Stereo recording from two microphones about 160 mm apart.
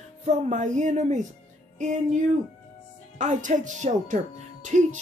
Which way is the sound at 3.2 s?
50° right (ahead or behind).